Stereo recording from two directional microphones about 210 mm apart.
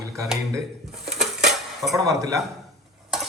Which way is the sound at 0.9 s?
Centre (ahead or behind).